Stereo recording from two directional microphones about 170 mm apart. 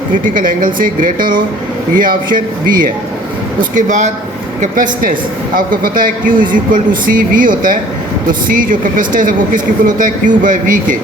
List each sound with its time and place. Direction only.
0.1 s speech: 50° right (ahead or behind)